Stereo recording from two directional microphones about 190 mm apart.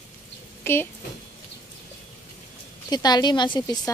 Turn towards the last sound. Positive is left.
turn(degrees=20)  # may be behind; listen again after turning